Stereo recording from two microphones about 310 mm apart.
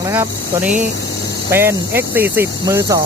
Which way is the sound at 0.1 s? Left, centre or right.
Centre.